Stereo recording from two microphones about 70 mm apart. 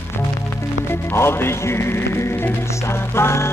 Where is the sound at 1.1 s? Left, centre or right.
Left.